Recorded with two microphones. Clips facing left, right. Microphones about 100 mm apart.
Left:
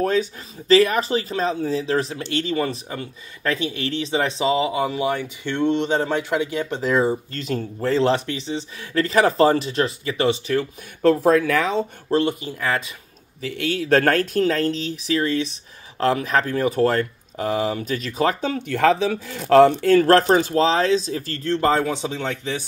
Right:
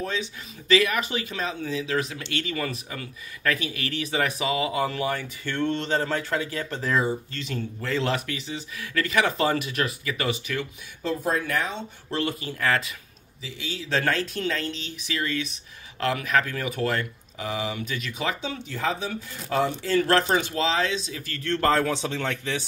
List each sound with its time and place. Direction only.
0.0 s speech: 45° left (ahead or behind); by 7.0 s 20° left (ahead or behind)
7.0 s speech: 35° left (ahead or behind)
11.0 s speech: 80° left
12.1 s speech: 25° left (ahead or behind)
13.4 s speech: 60° left (ahead or behind)
19.9 s speech: 40° left (ahead or behind)
21.5 s speech: 15° left (ahead or behind)